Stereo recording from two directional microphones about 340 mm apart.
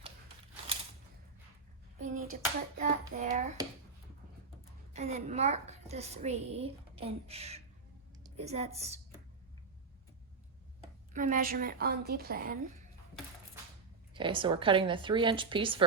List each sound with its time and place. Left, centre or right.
2.0 s hands: right
4.9 s a woman's voice: centre
11.1 s a woman's voice: right
14.1 s a woman's voice: centre